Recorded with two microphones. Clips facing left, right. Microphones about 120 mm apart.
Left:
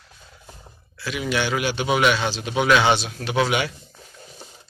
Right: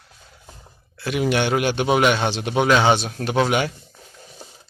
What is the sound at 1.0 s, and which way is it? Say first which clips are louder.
A man's voice: right 4 dB; 55° right (ahead or behind).